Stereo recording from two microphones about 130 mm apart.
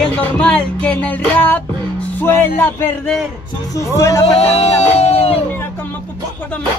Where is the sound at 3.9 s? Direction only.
20° left (ahead or behind).